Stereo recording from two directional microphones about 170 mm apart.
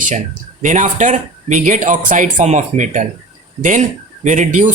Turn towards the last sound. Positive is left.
turn(degrees=-50)  # may be behind; listen again after turning